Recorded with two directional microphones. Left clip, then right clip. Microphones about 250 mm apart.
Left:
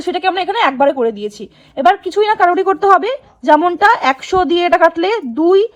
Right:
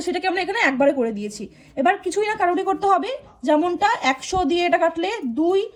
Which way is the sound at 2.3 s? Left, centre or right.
Left.